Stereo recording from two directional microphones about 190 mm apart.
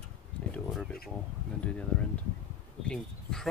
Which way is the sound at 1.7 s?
5° left (ahead or behind).